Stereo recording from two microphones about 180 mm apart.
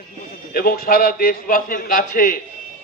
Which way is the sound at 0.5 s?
55° left (ahead or behind).